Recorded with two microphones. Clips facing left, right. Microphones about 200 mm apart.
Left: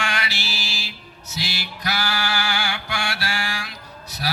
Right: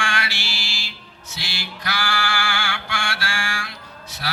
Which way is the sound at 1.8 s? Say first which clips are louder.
Even; 40° left (ahead or behind).